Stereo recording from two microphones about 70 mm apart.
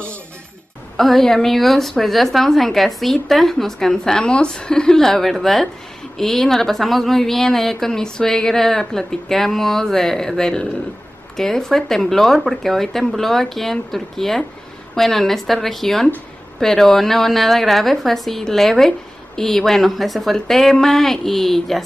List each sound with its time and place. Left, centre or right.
0.9 s a woman's voice: centre